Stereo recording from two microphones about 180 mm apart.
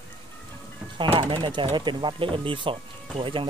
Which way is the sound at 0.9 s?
30° right (ahead or behind).